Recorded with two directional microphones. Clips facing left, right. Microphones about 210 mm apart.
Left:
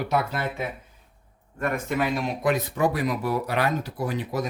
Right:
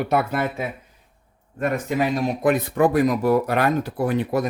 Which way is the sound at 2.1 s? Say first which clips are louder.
Right 4 dB; 50° right (ahead or behind).